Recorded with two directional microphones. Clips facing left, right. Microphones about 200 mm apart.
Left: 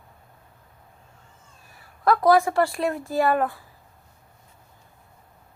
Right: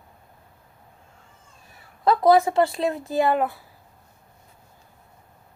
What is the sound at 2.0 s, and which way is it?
Speech, 25° right (ahead or behind).